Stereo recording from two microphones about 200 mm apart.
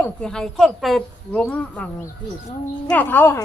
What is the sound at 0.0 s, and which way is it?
A woman's voice, 5° left (ahead or behind).